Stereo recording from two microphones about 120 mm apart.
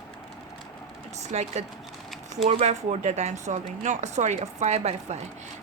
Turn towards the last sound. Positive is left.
turn(degrees=-65)  # may be behind; listen again after turning